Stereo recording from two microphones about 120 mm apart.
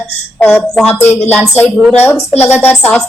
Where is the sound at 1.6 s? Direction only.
15° left (ahead or behind).